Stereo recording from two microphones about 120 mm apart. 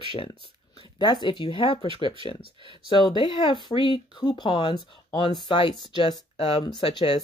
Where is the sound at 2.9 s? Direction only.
40° left (ahead or behind).